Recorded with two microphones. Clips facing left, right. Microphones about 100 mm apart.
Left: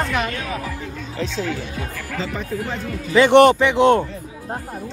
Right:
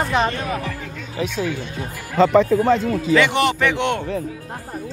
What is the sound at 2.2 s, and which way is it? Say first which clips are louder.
Speech: right 13 dB; 80° right.